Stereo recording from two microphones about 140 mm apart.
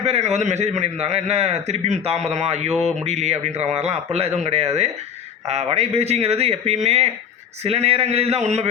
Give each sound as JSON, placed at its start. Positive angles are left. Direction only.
{"t": 0.0, "sound": "a man's voice", "side_deg": -50}